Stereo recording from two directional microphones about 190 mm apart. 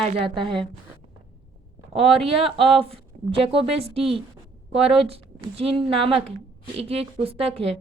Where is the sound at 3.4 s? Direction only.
30° right (ahead or behind).